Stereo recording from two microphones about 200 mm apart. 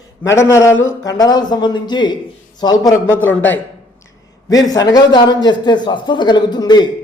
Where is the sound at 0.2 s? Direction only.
15° left (ahead or behind).